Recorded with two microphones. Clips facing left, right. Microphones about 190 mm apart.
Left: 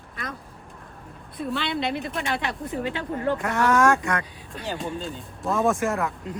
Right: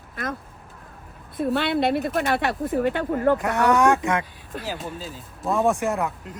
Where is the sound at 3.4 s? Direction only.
Centre (ahead or behind).